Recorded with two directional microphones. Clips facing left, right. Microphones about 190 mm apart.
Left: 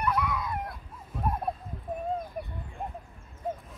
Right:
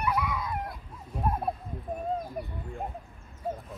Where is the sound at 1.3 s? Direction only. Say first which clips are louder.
Right 1 dB; centre (ahead or behind).